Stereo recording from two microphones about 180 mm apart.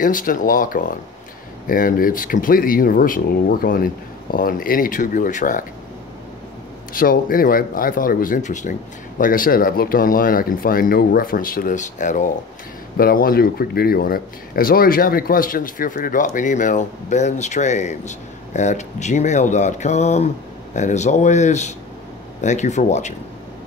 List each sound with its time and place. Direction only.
0.0 s speech: 50° left (ahead or behind)
6.9 s speech: 55° left (ahead or behind)
12.9 s speech: 55° left (ahead or behind)